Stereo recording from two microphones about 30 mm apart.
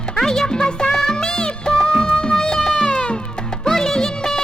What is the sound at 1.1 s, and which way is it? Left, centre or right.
Music, left.